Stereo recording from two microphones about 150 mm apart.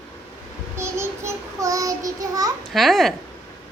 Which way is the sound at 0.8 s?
20° right (ahead or behind).